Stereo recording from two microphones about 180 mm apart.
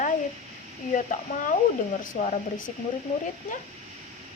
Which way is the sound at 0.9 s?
45° left (ahead or behind).